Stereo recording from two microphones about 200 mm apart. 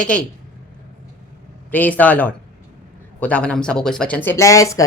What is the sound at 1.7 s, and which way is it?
Speech, 10° left (ahead or behind).